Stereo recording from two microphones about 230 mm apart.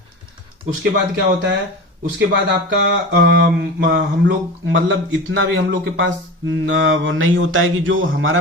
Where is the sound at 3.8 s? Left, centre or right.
Right.